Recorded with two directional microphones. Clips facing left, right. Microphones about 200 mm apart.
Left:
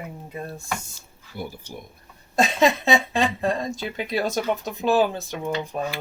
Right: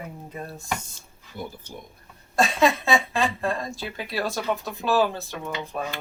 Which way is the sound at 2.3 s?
20° left (ahead or behind).